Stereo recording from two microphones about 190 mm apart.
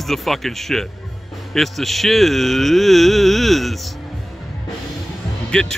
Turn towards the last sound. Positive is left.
turn(degrees=5)  # may be behind; listen again after turning